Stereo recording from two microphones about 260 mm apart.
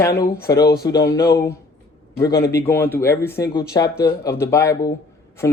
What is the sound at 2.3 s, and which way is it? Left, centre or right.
Speech, left.